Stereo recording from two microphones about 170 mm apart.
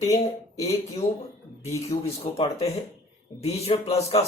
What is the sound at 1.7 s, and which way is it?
Speech, 35° left (ahead or behind).